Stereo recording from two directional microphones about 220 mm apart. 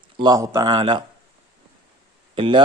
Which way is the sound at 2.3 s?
25° right (ahead or behind).